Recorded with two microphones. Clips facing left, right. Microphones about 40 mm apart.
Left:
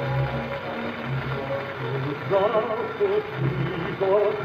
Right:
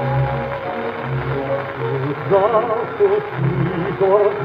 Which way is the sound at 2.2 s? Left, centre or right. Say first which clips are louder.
Right 7 dB; right.